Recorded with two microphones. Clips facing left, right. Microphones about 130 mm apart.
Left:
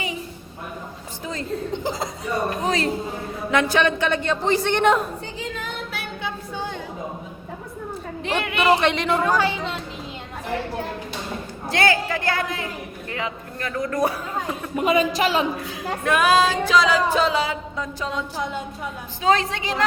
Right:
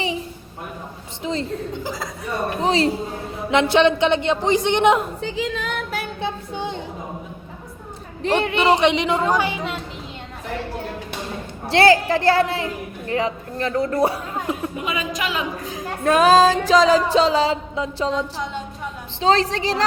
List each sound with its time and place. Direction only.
1.2 s a sound: 25° right (ahead or behind)
1.7 s speech: 20° left (ahead or behind)
2.6 s a woman's voice: 30° right (ahead or behind)
5.2 s speech: 90° right
6.2 s a sound: 20° right (ahead or behind)
8.4 s a woman's voice: 25° right (ahead or behind)
8.8 s a woman's voice: 15° right (ahead or behind)
11.6 s music: 30° right (ahead or behind)
13.1 s speech: 30° right (ahead or behind)
14.8 s a man's voice: 35° left (ahead or behind)
15.5 s music: 40° right (ahead or behind)